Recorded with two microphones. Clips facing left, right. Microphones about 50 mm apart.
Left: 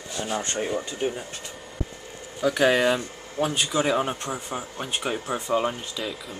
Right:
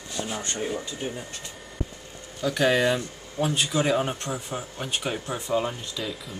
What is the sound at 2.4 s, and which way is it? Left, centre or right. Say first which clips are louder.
Speech: left 2 dB; centre.